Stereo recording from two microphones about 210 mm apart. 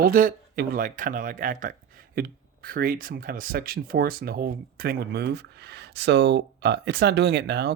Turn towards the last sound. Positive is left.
turn(degrees=-50)  # may be behind; listen again after turning